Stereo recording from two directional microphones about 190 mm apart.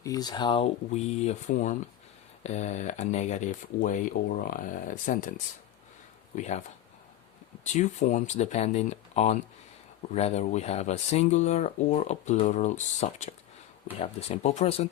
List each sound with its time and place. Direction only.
0.0 s speech: 20° left (ahead or behind); by 5.3 s 45° left (ahead or behind)
6.3 s speech: 40° left (ahead or behind)
7.6 s speech: 40° left (ahead or behind)